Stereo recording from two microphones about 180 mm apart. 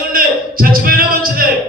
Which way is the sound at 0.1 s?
55° right (ahead or behind).